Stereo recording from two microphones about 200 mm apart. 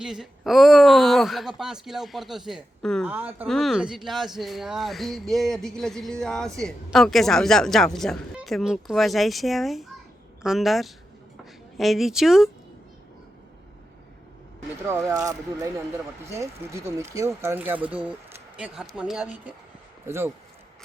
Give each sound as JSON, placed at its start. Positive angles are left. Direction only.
{"t": 0.0, "sound": "speech", "side_deg": 0}
{"t": 14.8, "sound": "speech", "side_deg": -15}